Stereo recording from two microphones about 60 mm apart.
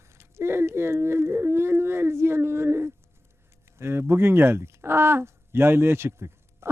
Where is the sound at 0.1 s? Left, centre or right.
Right.